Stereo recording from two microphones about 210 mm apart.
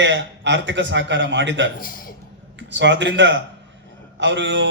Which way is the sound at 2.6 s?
60° right (ahead or behind).